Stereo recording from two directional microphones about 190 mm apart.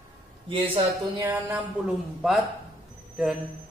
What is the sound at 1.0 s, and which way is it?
Speech, 15° right (ahead or behind).